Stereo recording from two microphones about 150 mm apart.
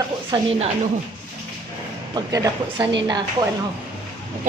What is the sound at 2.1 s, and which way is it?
Speech, 25° right (ahead or behind).